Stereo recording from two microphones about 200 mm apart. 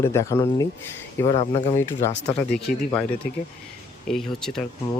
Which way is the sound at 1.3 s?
30° left (ahead or behind).